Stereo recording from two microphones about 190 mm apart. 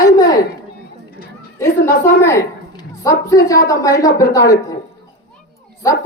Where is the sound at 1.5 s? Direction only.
15° left (ahead or behind).